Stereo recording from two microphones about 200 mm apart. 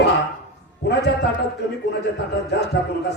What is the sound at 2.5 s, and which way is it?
Speech, 55° left (ahead or behind).